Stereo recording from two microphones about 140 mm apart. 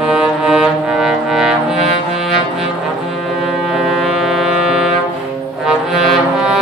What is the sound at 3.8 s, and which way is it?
Music, centre (ahead or behind).